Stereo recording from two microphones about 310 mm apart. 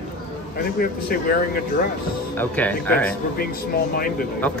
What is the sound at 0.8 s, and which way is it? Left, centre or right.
Speech, left.